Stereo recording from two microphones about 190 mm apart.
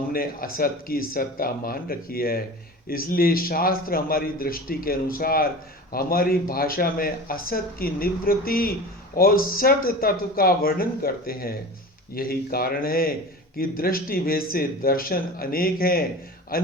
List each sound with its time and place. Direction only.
0.1 s speech: 50° left (ahead or behind)